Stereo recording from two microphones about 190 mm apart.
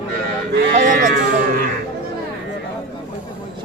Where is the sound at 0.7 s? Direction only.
40° right (ahead or behind).